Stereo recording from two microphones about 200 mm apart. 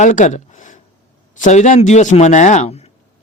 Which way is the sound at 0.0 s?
35° left (ahead or behind).